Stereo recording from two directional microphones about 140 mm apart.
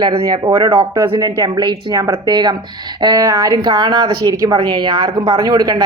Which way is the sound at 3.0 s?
25° right (ahead or behind).